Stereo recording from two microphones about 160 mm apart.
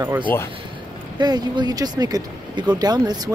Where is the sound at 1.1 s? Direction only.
25° right (ahead or behind).